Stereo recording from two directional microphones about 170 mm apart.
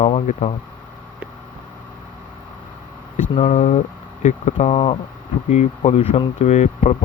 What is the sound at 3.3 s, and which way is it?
Speech, 40° left (ahead or behind).